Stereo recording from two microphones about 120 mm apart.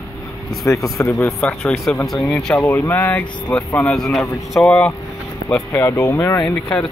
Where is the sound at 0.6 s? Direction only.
25° left (ahead or behind).